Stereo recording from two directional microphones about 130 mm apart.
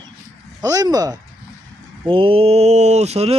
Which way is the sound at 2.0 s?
45° right (ahead or behind).